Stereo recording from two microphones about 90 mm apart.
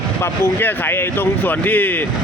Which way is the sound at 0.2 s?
25° left (ahead or behind).